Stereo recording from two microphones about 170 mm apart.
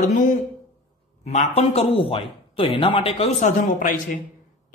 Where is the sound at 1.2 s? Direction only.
40° left (ahead or behind).